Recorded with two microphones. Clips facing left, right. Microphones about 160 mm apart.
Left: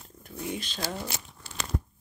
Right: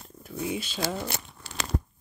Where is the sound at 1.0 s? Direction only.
75° right (ahead or behind).